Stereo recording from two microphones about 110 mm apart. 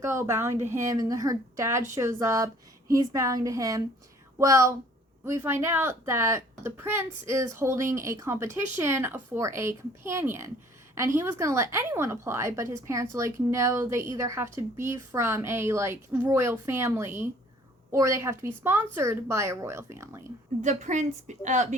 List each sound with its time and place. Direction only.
0.0 s a woman's voice: 25° right (ahead or behind)
20.6 s a woman's voice: 90° right